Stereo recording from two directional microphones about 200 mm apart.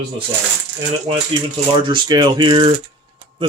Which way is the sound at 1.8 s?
20° right (ahead or behind).